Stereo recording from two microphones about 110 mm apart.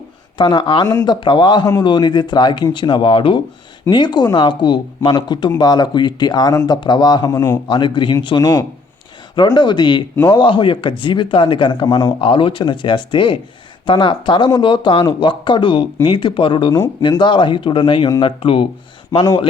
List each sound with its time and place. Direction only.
0.3 s speech: 45° left (ahead or behind)
7.7 s speech: 45° left (ahead or behind)
12.2 s speech: 50° left (ahead or behind)